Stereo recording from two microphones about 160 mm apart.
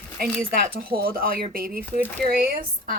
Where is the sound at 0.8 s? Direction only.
65° right (ahead or behind).